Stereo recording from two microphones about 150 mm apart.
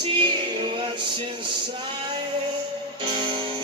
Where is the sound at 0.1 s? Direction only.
35° right (ahead or behind).